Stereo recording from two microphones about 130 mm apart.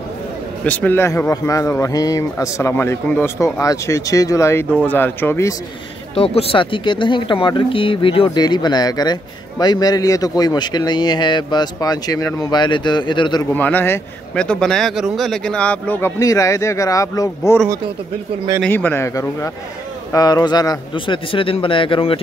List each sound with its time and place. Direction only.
0.7 s speech: 15° left (ahead or behind)
6.1 s speech: 50° left (ahead or behind)
13.6 s speech: 15° left (ahead or behind)
16.2 s speech: 25° left (ahead or behind)
18.7 s speech: 15° left (ahead or behind); by 22.2 s 45° left (ahead or behind)